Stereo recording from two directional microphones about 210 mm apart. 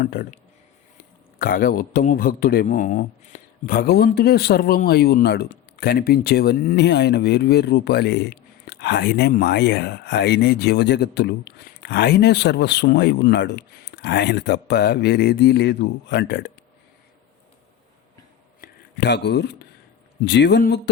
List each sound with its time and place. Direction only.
0.0 s a man's voice: 45° left (ahead or behind)
1.4 s a man's voice: 45° left (ahead or behind)
18.6 s a man's voice: 55° left (ahead or behind)